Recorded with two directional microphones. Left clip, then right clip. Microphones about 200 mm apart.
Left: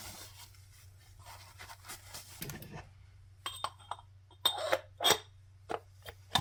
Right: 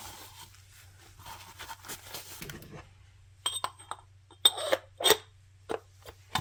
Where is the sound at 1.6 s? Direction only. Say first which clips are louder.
Right 6 dB; 30° right (ahead or behind).